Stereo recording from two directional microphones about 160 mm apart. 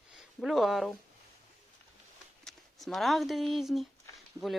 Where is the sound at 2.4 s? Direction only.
Centre (ahead or behind).